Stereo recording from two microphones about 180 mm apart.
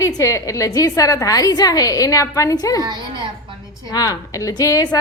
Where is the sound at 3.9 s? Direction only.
20° left (ahead or behind).